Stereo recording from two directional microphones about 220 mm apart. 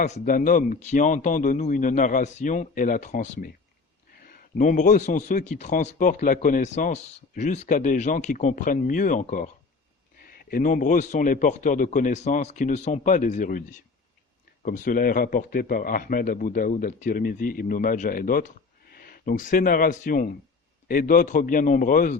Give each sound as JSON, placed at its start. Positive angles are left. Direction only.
{"t": 0.0, "sound": "a man's voice", "side_deg": 35}